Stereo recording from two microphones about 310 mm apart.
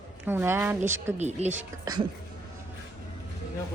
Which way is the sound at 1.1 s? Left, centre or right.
Right.